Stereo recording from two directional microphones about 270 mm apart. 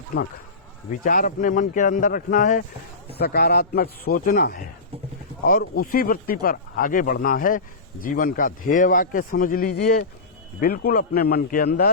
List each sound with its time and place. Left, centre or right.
0.9 s a man's voice: left